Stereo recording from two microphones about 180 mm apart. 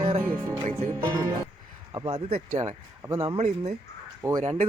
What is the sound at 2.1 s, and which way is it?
Speech, 35° right (ahead or behind).